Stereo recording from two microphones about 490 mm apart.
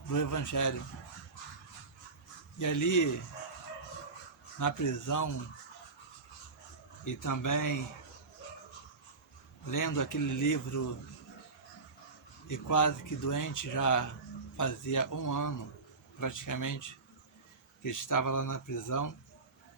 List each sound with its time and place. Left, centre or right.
0.1 s speech: left
2.6 s speech: left
4.6 s speech: left
7.0 s speech: left
9.6 s speech: left
12.5 s speech: left